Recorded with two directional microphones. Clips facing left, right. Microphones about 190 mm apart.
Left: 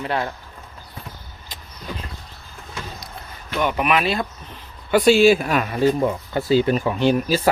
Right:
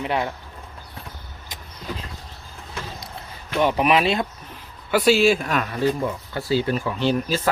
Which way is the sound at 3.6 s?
30° right (ahead or behind).